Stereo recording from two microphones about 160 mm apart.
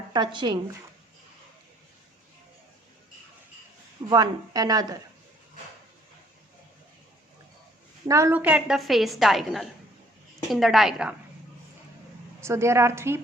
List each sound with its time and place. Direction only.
0.1 s speech: 30° right (ahead or behind)
4.1 s speech: 25° right (ahead or behind)
8.0 s a woman's voice: 20° right (ahead or behind); by 11.1 s 5° right (ahead or behind)
12.4 s a woman's voice: 15° right (ahead or behind)